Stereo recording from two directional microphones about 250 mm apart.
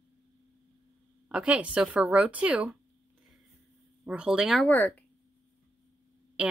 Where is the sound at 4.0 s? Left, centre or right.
Centre.